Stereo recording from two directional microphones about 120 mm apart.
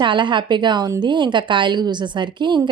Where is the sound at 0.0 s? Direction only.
40° right (ahead or behind).